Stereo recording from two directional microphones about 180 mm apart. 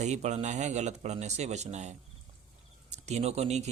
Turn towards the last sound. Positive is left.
turn(degrees=-35)  # may be behind; listen again after turning